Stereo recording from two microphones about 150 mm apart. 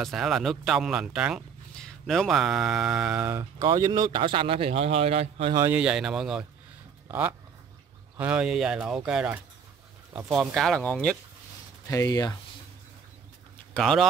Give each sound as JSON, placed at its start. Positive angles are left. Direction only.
{"t": 0.0, "sound": "speech", "side_deg": 0}
{"t": 3.6, "sound": "a man's voice", "side_deg": -30}
{"t": 5.7, "sound": "speech", "side_deg": -5}
{"t": 10.5, "sound": "speech", "side_deg": 5}
{"t": 11.9, "sound": "speech", "side_deg": 25}
{"t": 13.7, "sound": "speech", "side_deg": 0}